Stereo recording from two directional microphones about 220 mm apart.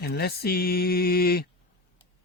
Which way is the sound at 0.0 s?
45° left (ahead or behind).